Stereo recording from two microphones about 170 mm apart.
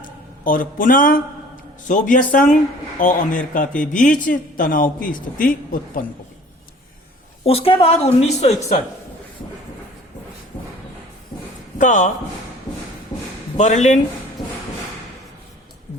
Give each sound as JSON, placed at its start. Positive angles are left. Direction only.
{"t": 0.4, "sound": "speech", "side_deg": 55}
{"t": 7.4, "sound": "a woman's voice", "side_deg": 35}
{"t": 11.8, "sound": "speech", "side_deg": 45}
{"t": 13.6, "sound": "speech", "side_deg": 45}